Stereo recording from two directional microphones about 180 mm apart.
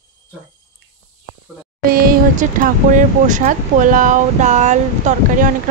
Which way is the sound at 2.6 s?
45° right (ahead or behind).